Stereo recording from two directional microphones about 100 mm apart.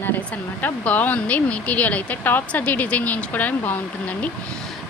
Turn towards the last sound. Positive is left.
turn(degrees=15)  # may be behind; listen again after turning